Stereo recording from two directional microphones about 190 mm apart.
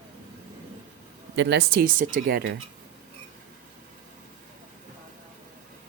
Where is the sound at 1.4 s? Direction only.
60° right (ahead or behind).